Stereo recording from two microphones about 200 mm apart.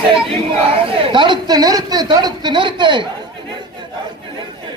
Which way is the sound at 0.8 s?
25° right (ahead or behind).